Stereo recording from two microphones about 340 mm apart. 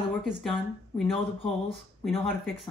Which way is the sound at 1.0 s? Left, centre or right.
Centre.